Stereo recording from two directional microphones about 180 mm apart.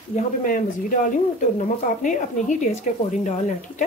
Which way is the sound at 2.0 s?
45° left (ahead or behind).